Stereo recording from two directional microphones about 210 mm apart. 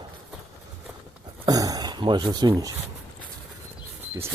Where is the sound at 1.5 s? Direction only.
15° right (ahead or behind).